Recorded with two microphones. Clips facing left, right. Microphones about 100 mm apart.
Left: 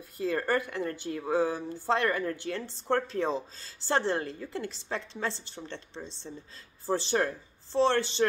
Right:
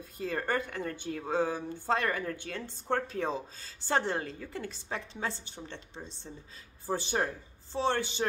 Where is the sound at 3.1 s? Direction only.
20° left (ahead or behind).